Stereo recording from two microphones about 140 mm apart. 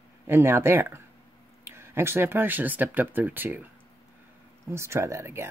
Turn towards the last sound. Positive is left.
turn(degrees=-20)  # may be behind; listen again after turning